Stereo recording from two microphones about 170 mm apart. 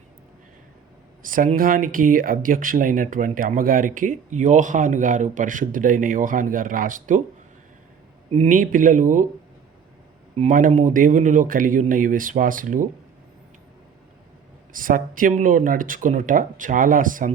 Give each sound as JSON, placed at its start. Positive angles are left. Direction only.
{"t": 1.2, "sound": "speech", "side_deg": -55}
{"t": 8.4, "sound": "speech", "side_deg": -55}
{"t": 10.3, "sound": "speech", "side_deg": -45}
{"t": 14.7, "sound": "speech", "side_deg": -55}